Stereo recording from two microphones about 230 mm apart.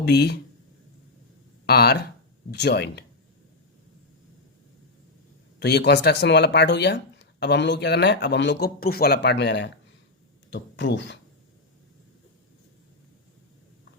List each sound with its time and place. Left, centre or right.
0.0 s speech: left
1.6 s speech: left
5.5 s speech: left